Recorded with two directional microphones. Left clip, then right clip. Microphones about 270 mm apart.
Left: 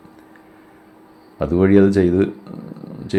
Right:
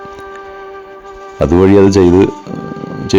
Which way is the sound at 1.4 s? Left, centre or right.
Right.